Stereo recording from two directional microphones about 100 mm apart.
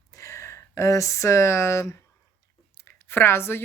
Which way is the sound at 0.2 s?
30° left (ahead or behind).